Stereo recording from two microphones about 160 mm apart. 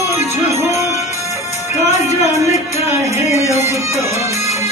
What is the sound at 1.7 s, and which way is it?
Music, 45° left (ahead or behind).